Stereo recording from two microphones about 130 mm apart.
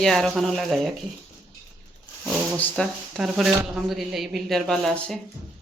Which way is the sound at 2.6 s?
5° left (ahead or behind).